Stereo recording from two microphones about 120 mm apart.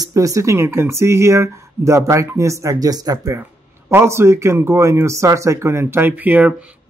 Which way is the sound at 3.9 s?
20° right (ahead or behind).